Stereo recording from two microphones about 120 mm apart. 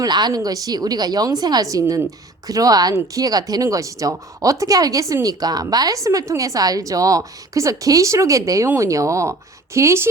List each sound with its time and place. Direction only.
0.0 s a woman's voice: 35° right (ahead or behind)